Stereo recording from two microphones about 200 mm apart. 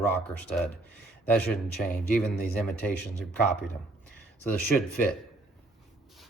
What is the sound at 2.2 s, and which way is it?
Speech, 5° left (ahead or behind).